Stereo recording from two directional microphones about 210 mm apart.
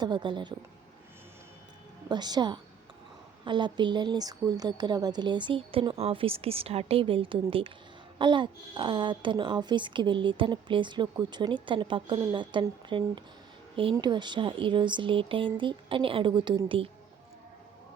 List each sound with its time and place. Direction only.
0.0 s speech: 20° right (ahead or behind)
2.0 s speech: 20° right (ahead or behind)